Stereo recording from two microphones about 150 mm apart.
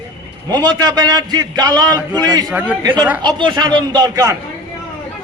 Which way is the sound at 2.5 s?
10° right (ahead or behind).